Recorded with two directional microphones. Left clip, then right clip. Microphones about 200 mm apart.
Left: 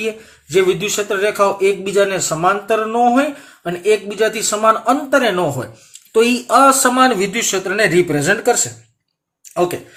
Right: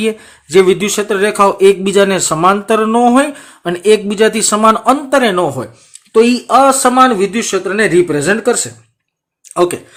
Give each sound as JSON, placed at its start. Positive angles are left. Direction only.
{"t": 0.5, "sound": "a man's voice", "side_deg": -40}